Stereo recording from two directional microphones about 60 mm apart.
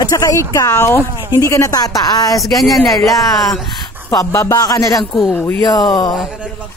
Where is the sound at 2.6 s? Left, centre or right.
Centre.